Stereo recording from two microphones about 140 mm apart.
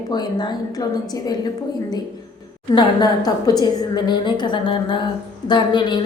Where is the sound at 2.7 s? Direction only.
30° left (ahead or behind).